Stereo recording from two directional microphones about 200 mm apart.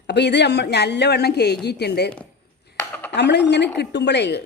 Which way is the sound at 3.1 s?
60° left (ahead or behind).